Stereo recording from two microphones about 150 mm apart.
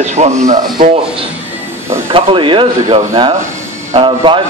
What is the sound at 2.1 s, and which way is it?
A man's voice, 35° right (ahead or behind).